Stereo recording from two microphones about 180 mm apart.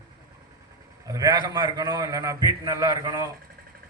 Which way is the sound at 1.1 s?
20° right (ahead or behind).